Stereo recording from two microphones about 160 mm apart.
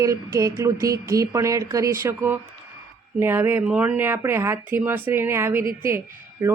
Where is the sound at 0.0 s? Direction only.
20° right (ahead or behind).